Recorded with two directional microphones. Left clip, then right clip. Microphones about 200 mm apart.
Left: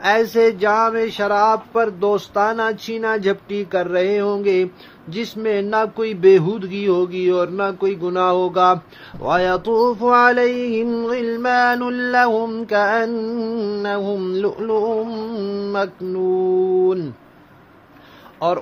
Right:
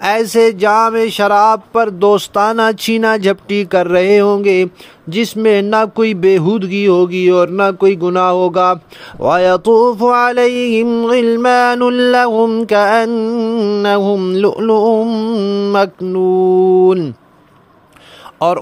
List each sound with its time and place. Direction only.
0.0 s mantra: 45° right (ahead or behind)